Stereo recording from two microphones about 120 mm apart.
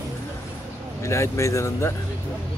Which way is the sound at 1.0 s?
25° left (ahead or behind).